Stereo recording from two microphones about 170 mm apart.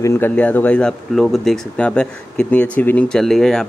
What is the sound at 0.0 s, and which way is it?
Speech, 10° left (ahead or behind).